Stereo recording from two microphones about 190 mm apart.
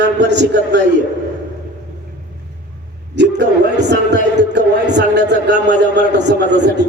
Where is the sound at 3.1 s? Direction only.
65° right (ahead or behind).